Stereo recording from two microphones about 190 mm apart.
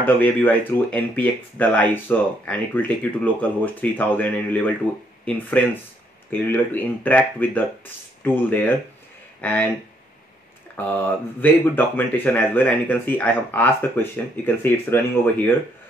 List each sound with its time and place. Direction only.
0.0 s speech: 10° left (ahead or behind)
10.8 s speech: 10° left (ahead or behind)